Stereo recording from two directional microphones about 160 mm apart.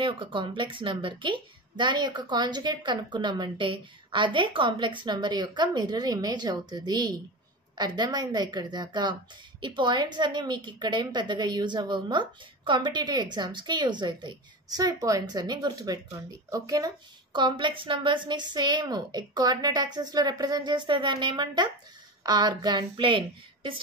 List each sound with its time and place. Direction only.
0.0 s a woman's voice: 30° right (ahead or behind)